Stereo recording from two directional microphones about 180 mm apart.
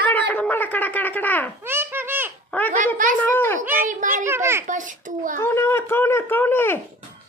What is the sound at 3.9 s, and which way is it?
Speech, 45° right (ahead or behind).